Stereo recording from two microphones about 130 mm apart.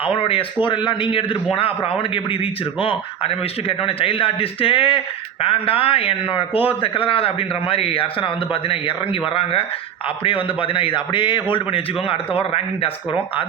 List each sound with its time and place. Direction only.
0.0 s a man's voice: 45° left (ahead or behind)